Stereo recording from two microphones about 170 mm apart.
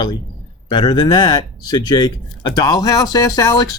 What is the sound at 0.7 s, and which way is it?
Speech, 25° left (ahead or behind).